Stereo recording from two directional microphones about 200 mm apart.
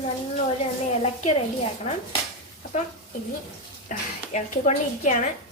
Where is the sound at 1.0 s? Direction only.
30° left (ahead or behind).